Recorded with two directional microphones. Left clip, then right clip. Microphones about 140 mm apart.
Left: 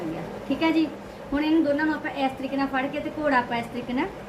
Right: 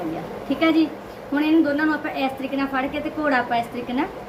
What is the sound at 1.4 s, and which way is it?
A woman's voice, 20° right (ahead or behind).